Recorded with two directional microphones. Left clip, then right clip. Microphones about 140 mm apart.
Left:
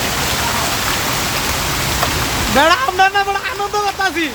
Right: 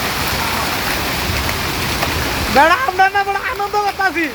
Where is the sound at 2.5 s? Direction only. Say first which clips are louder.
Right 1 dB; 25° left (ahead or behind).